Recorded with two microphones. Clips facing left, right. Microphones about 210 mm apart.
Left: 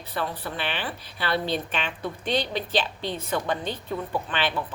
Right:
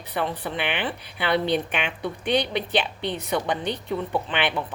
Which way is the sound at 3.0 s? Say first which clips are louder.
Right 2 dB; 70° right (ahead or behind).